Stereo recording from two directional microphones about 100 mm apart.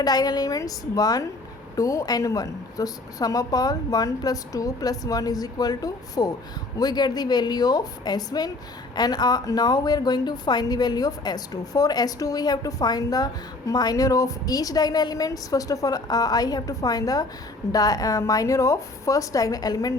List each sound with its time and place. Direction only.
0.0 s a woman's voice: 40° left (ahead or behind)